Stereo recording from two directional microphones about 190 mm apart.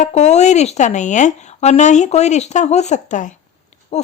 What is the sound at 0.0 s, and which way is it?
Speech, 35° left (ahead or behind).